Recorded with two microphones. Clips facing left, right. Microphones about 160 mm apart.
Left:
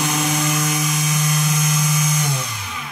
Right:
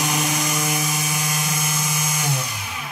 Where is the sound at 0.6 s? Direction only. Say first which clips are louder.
Left 2 dB; 10° right (ahead or behind).